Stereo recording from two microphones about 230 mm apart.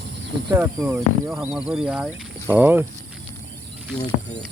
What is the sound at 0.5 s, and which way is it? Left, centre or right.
Speech, centre.